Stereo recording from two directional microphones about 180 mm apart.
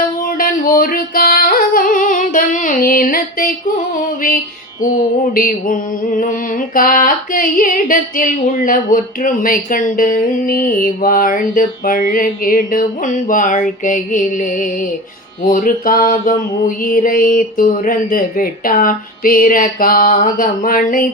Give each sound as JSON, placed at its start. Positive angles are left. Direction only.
{"t": 0.2, "sound": "music", "side_deg": 50}
{"t": 3.9, "sound": "mantra", "side_deg": 50}